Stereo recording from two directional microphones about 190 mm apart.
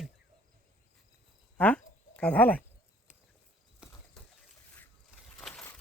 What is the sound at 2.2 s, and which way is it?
Speech, 5° left (ahead or behind).